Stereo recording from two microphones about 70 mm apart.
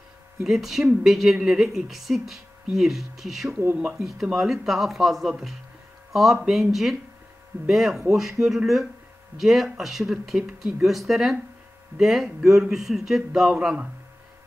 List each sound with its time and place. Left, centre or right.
0.4 s speech: centre
3.4 s speech: right
3.9 s speech: centre